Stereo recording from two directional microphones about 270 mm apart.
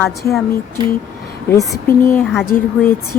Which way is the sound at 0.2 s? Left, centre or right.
Centre.